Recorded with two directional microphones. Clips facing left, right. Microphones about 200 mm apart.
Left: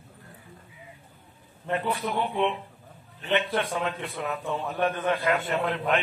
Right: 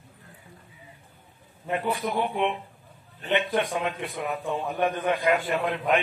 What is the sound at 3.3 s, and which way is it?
A man's voice, 15° right (ahead or behind).